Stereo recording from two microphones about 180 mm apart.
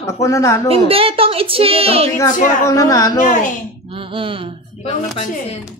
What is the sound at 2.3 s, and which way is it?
Speech, 45° left (ahead or behind).